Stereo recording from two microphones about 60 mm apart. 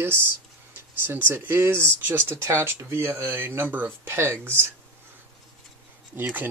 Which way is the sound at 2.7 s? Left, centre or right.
Right.